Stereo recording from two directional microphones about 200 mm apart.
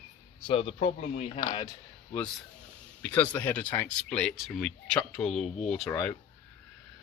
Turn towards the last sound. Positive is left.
turn(degrees=5)  # may be behind; listen again after turning